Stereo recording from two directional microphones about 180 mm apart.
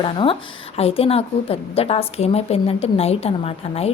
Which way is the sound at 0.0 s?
30° left (ahead or behind).